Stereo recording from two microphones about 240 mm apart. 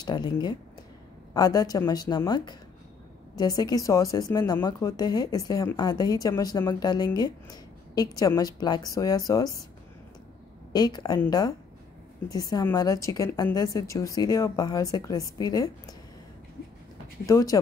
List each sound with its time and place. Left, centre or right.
0.0 s speech: centre
10.7 s speech: centre
17.3 s speech: centre